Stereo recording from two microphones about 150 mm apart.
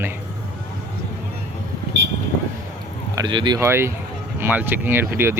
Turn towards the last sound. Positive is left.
turn(degrees=-15)  # may be behind; listen again after turning